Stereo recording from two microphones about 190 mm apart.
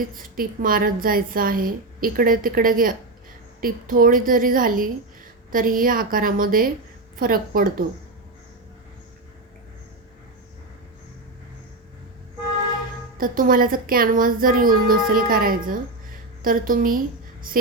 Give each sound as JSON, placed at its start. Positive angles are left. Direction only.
{"t": 0.1, "sound": "a woman's voice", "side_deg": -45}
{"t": 13.1, "sound": "a woman's voice", "side_deg": -45}